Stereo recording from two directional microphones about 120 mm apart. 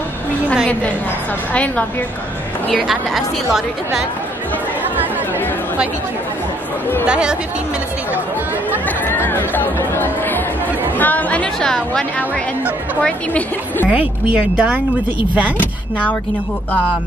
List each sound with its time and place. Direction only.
1.5 s speech: 10° left (ahead or behind)
2.7 s a woman's voice: centre (ahead or behind)
7.1 s speech: 10° right (ahead or behind)
8.8 s speech: 15° left (ahead or behind)
13.8 s speech: 10° right (ahead or behind)
15.6 s speech: 10° left (ahead or behind)